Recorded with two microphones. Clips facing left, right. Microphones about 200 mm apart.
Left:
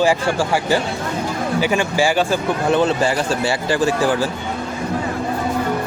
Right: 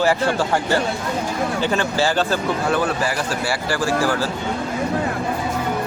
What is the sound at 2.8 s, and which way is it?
Speech, 25° left (ahead or behind).